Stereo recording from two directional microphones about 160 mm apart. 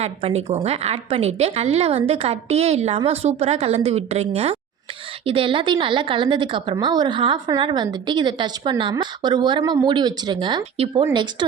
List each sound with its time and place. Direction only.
0.0 s a woman's voice: 40° right (ahead or behind)
10.6 s a woman's voice: 40° right (ahead or behind)